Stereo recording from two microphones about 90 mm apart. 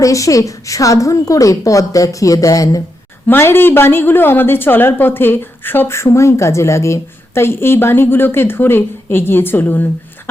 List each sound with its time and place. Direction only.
0.0 s a woman's voice: 35° left (ahead or behind)
3.2 s a woman's voice: 25° left (ahead or behind)